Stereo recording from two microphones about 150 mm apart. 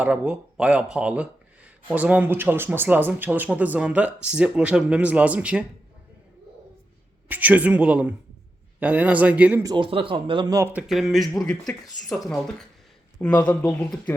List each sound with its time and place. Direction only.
0.0 s speech: 5° right (ahead or behind)
7.3 s speech: 10° right (ahead or behind)
9.6 s speech: 35° right (ahead or behind)
10.7 s speech: 5° right (ahead or behind)